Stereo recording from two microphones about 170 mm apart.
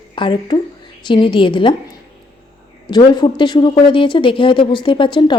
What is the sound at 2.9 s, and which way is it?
A woman's voice, 25° left (ahead or behind).